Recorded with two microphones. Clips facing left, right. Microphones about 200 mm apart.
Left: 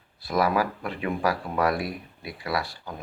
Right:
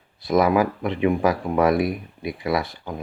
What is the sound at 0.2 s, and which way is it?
Speech, 20° right (ahead or behind).